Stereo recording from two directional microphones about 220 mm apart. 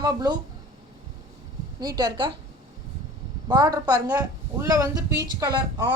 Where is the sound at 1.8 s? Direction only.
20° right (ahead or behind).